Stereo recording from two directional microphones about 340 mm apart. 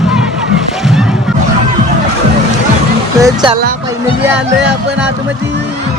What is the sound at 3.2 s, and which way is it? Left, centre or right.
Music, centre.